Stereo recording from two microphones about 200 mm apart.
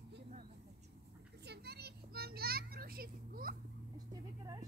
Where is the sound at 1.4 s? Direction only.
55° right (ahead or behind).